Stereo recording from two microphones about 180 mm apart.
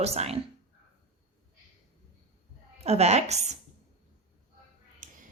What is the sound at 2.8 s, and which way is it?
Speech, 35° right (ahead or behind).